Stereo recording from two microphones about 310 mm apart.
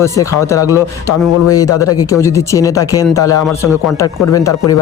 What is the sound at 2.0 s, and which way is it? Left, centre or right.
Speech, centre.